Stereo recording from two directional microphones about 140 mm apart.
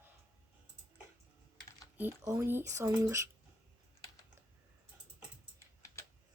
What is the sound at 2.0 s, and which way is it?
Speech, 20° right (ahead or behind).